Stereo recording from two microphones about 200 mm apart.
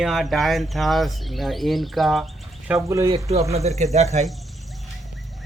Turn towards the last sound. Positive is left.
turn(degrees=-35)  # may be behind; listen again after turning